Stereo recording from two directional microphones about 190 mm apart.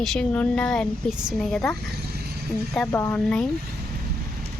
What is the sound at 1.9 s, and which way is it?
Vehicle, 55° right (ahead or behind).